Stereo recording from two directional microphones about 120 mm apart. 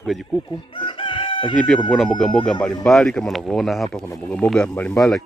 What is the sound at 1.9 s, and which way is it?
Speech, centre (ahead or behind).